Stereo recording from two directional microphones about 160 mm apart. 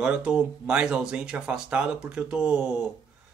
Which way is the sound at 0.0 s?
5° right (ahead or behind).